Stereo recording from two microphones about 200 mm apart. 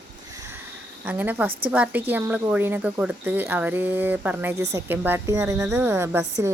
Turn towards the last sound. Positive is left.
turn(degrees=-15)  # may be behind; listen again after turning